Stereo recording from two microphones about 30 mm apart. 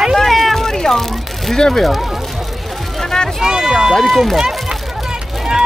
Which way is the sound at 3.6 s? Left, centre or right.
Centre.